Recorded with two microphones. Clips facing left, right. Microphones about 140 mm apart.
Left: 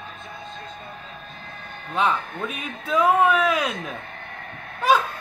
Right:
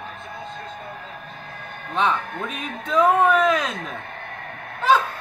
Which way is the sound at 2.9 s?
10° left (ahead or behind).